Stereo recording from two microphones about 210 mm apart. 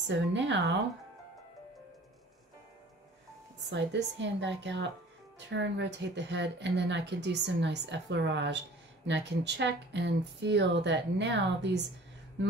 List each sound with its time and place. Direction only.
0.1 s speech: 60° right (ahead or behind)
3.7 s speech: 55° right (ahead or behind)